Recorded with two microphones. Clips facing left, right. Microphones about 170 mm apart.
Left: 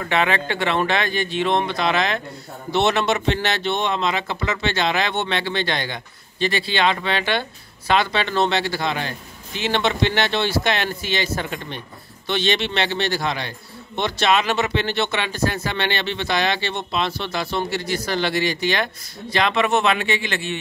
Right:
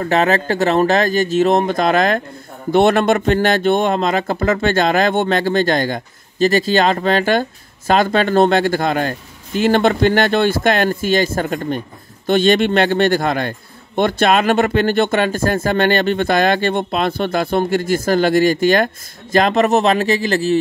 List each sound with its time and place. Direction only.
0.0 s speech: 40° right (ahead or behind)